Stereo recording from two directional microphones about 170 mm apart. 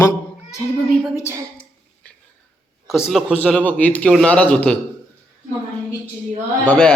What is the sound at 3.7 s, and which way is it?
Speech, 10° left (ahead or behind).